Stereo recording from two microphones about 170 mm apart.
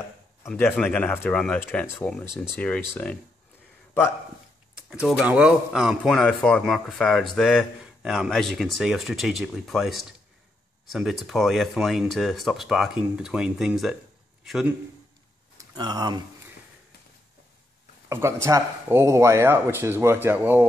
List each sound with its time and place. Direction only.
0.5 s speech: 5° left (ahead or behind)
4.8 s a man's voice: 5° right (ahead or behind)
15.5 s a sound: 25° right (ahead or behind)
18.0 s speech: 15° right (ahead or behind)